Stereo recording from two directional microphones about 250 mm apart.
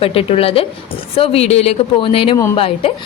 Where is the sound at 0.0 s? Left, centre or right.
Left.